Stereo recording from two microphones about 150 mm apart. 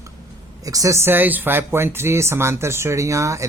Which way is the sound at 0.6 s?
25° right (ahead or behind).